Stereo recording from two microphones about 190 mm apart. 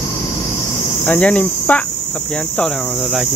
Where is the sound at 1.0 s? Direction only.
5° left (ahead or behind).